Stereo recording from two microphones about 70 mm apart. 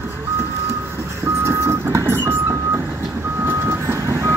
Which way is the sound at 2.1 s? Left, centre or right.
Right.